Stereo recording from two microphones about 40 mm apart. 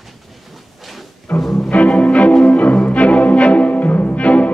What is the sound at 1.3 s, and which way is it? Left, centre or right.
Music, centre.